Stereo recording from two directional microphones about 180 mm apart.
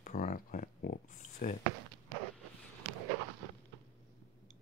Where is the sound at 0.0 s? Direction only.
50° left (ahead or behind).